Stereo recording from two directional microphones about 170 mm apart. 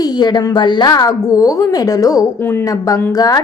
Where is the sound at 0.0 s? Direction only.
25° left (ahead or behind).